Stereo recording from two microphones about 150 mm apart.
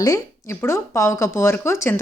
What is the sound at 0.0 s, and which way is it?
Speech, 20° left (ahead or behind).